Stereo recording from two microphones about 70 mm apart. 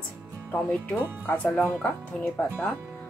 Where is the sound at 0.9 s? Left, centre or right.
Left.